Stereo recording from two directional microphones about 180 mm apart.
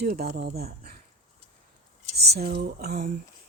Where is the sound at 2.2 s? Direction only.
60° right (ahead or behind).